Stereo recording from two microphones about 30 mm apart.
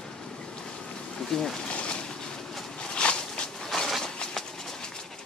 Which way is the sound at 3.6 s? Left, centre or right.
Centre.